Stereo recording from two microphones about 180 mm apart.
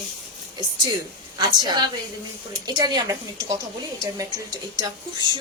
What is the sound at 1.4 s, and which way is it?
A woman's voice, 25° right (ahead or behind).